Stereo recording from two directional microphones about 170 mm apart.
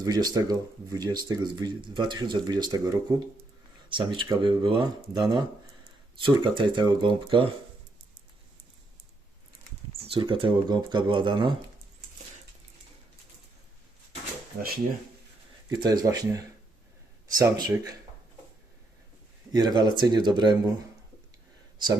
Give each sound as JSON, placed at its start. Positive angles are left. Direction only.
{"t": 0.0, "sound": "speech", "side_deg": -20}
{"t": 6.1, "sound": "speech", "side_deg": -30}
{"t": 10.0, "sound": "speech", "side_deg": -30}
{"t": 15.7, "sound": "speech", "side_deg": -20}
{"t": 19.5, "sound": "speech", "side_deg": -25}